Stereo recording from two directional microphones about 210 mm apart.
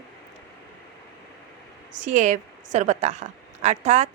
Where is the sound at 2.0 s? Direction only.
35° right (ahead or behind).